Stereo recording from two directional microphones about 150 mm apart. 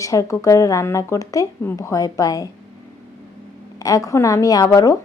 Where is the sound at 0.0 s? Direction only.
20° left (ahead or behind).